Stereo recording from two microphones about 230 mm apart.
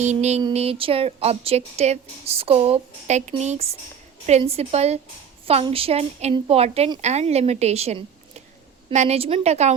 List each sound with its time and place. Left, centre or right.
0.0 s speech: right